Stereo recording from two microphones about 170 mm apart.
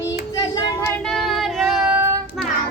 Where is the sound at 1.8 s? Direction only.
10° right (ahead or behind).